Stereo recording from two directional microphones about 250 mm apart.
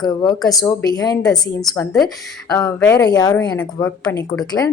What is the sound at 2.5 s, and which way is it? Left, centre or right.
A woman's voice, centre.